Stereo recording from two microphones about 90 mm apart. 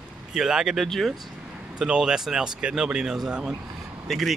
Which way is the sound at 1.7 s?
10° right (ahead or behind).